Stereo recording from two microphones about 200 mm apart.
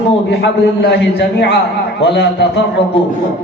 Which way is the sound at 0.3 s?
55° left (ahead or behind).